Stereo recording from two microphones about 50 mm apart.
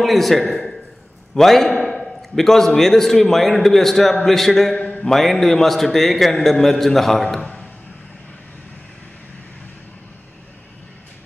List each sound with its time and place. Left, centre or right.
0.0 s a man's voice: centre